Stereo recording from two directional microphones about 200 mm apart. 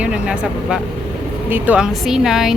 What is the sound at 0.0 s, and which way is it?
A woman's voice, 5° right (ahead or behind).